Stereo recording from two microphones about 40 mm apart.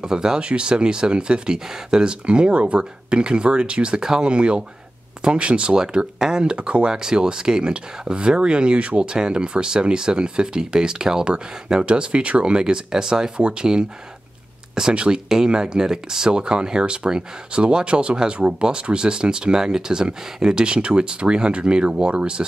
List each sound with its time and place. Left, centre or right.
0.0 s speech: centre